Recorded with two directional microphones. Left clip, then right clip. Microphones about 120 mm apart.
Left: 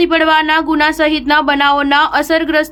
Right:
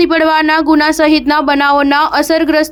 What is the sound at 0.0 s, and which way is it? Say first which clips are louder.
A woman's voice: right 1 dB; 35° right (ahead or behind).